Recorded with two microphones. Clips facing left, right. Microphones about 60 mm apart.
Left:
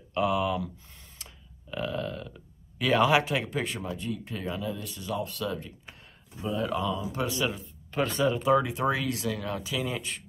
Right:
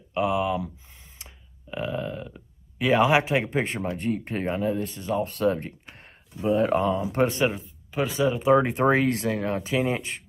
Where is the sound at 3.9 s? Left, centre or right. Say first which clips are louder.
Right 6 dB; right.